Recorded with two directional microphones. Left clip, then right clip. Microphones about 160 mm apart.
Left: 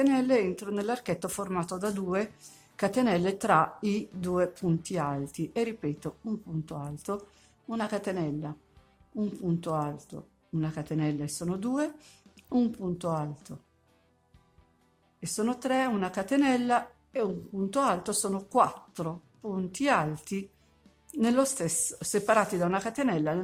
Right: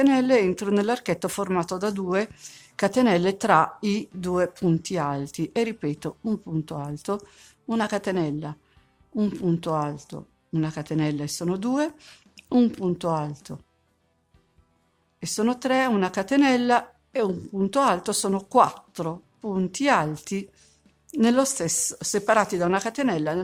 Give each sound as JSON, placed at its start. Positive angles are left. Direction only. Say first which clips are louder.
{"t": 0.0, "sound": "speech", "louder": "right 6 dB", "side_deg": -30}
{"t": 15.2, "sound": "speech", "louder": "right 6 dB", "side_deg": -30}